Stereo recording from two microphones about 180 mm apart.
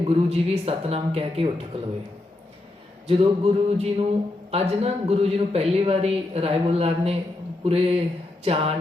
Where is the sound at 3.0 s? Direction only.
30° right (ahead or behind).